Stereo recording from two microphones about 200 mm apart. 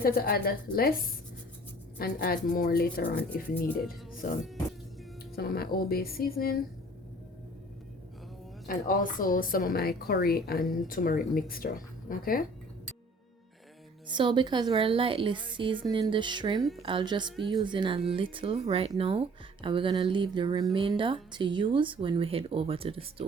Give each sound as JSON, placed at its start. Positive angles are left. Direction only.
{"t": 0.0, "sound": "speech", "side_deg": 50}
{"t": 4.2, "sound": "music", "side_deg": 40}
{"t": 5.3, "sound": "speech", "side_deg": 50}
{"t": 8.6, "sound": "speech", "side_deg": 45}
{"t": 14.1, "sound": "a woman's voice", "side_deg": -25}